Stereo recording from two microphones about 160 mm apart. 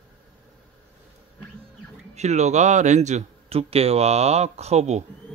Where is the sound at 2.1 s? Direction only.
45° right (ahead or behind).